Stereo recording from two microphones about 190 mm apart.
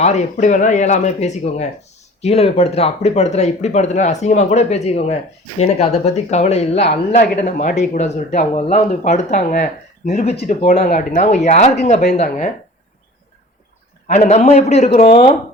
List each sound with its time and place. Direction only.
0.0 s speech: 35° left (ahead or behind)
14.1 s speech: 35° left (ahead or behind)